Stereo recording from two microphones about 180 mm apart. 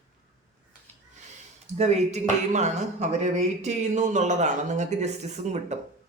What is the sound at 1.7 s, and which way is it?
Speech, 40° right (ahead or behind).